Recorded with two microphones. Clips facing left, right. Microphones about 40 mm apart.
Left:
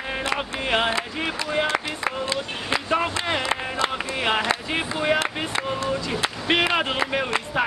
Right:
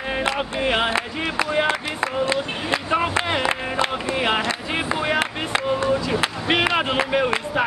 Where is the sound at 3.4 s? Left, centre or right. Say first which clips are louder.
Right 2 dB; right.